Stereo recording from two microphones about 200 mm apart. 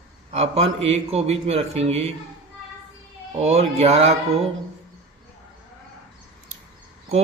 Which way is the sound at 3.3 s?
30° right (ahead or behind).